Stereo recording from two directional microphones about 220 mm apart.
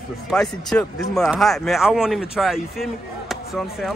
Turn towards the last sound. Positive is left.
turn(degrees=0)  # may be behind; listen again after turning